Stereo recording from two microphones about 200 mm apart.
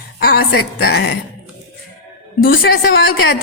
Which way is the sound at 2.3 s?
50° left (ahead or behind).